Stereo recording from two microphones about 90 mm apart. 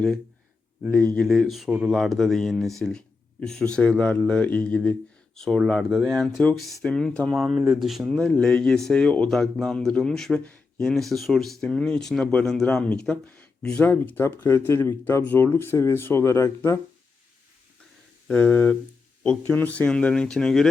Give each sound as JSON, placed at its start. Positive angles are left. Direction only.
{"t": 0.9, "sound": "speech", "side_deg": 15}
{"t": 1.2, "sound": "speech", "side_deg": 0}
{"t": 7.7, "sound": "speech", "side_deg": 0}
{"t": 18.3, "sound": "speech", "side_deg": 15}